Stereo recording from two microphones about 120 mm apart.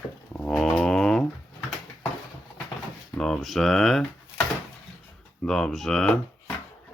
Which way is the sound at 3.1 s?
5° left (ahead or behind).